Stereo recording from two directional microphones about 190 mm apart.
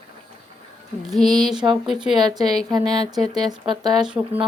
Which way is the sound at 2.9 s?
20° right (ahead or behind).